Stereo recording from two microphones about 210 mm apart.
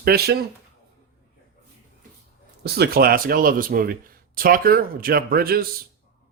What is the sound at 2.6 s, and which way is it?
Speech, 50° right (ahead or behind).